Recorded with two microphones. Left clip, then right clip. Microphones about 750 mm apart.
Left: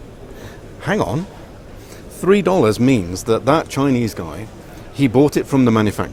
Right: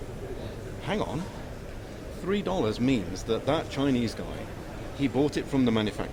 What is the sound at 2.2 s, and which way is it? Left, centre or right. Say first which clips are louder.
Speech: left 15 dB; left.